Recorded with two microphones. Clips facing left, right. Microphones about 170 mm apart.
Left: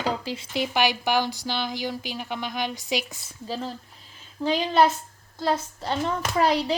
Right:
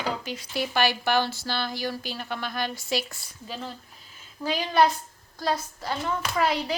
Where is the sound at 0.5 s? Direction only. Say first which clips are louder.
Left 1 dB; 15° left (ahead or behind).